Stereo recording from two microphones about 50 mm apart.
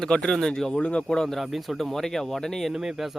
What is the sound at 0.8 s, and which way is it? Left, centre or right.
Speech, left.